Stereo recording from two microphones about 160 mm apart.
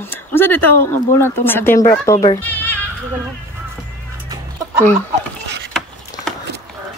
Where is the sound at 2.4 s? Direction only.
10° left (ahead or behind).